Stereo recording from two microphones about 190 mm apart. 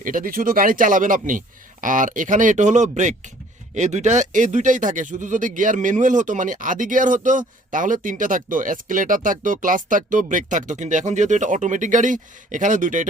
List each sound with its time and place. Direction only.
0.0 s speech: 45° right (ahead or behind)